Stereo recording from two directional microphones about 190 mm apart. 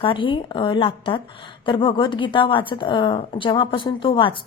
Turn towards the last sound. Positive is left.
turn(degrees=25)  # may be behind; listen again after turning